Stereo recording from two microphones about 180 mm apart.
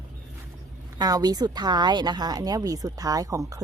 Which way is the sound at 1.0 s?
20° right (ahead or behind).